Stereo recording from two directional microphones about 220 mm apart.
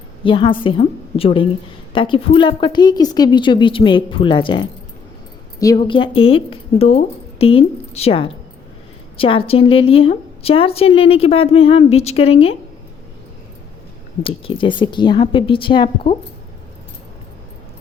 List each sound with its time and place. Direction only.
0.3 s a woman's voice: 20° left (ahead or behind)
14.2 s a woman's voice: 25° left (ahead or behind)